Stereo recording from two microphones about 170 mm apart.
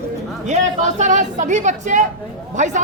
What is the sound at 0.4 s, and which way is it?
Speech, 45° right (ahead or behind).